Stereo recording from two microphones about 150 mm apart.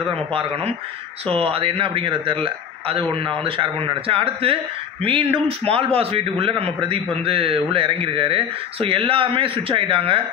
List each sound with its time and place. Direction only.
0.3 s speech: 40° right (ahead or behind)